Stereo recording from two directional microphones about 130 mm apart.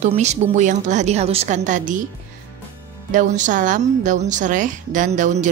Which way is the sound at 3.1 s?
75° right (ahead or behind).